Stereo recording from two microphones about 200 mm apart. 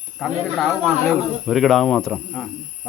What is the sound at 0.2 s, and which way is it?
A man's voice, centre (ahead or behind).